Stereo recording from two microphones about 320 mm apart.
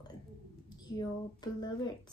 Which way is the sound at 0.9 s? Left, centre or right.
Centre.